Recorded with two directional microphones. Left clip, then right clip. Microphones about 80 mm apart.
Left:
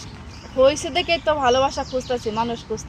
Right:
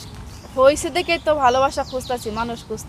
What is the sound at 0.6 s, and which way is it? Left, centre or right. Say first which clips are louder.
Speech: right 2 dB; right.